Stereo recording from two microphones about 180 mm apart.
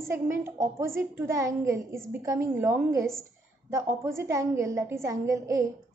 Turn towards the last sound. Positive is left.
turn(degrees=-15)  # may be behind; listen again after turning